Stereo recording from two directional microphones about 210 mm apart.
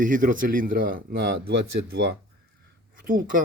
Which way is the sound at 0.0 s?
40° right (ahead or behind).